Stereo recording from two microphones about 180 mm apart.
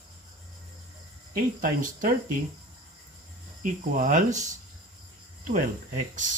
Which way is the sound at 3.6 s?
45° right (ahead or behind).